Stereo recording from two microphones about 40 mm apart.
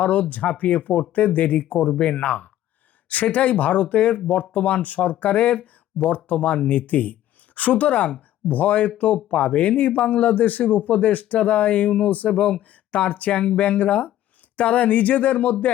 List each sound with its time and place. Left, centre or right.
0.0 s speech: left
2.0 s speech: left
2.2 s speech: left
12.3 s speech: left